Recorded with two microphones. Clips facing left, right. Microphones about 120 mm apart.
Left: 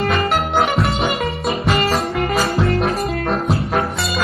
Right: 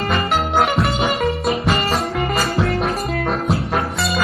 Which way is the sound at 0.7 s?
Centre (ahead or behind).